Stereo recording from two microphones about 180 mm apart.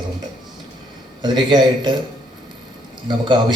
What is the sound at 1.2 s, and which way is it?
Speech, 25° right (ahead or behind).